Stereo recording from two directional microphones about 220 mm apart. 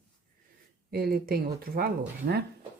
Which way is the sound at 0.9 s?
45° right (ahead or behind).